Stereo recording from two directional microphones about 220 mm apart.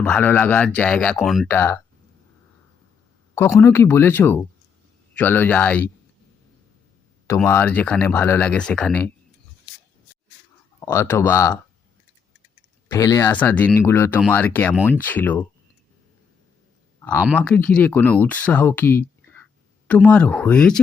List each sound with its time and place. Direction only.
0.0 s speech: 5° left (ahead or behind)
3.3 s speech: 10° left (ahead or behind)
7.4 s speech: 10° left (ahead or behind)
10.8 s speech: 10° left (ahead or behind)
12.9 s speech: 15° left (ahead or behind)
17.0 s a sound: 10° left (ahead or behind)
17.3 s speech: 5° left (ahead or behind)